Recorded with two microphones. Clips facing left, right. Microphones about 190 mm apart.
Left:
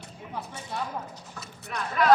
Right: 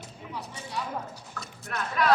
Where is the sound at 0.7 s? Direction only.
50° left (ahead or behind).